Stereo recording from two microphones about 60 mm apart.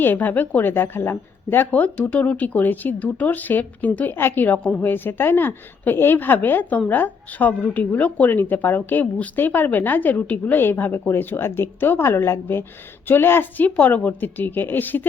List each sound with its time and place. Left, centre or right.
0.0 s a woman's voice: left
1.7 s speech: left
4.4 s speech: left
4.8 s a woman's voice: left